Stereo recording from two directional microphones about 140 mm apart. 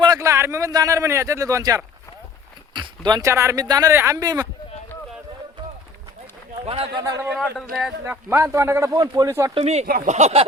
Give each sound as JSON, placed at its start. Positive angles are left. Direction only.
{"t": 0.0, "sound": "speech", "side_deg": -25}
{"t": 6.7, "sound": "speech", "side_deg": -40}
{"t": 7.0, "sound": "speech", "side_deg": -25}
{"t": 7.7, "sound": "speech", "side_deg": 0}
{"t": 8.0, "sound": "speech", "side_deg": -15}
{"t": 9.6, "sound": "speech", "side_deg": -50}
{"t": 9.8, "sound": "speech", "side_deg": -90}
{"t": 10.2, "sound": "speech", "side_deg": -50}